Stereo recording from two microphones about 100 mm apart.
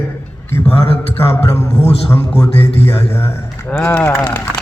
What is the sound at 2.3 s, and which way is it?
Speech, 80° left.